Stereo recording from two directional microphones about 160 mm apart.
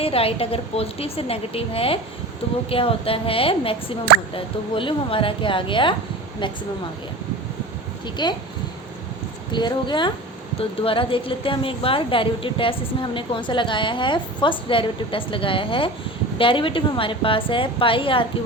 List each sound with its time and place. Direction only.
0.0 s a woman's voice: 35° left (ahead or behind)
8.0 s a woman's voice: 30° left (ahead or behind)
9.5 s a woman's voice: 30° left (ahead or behind)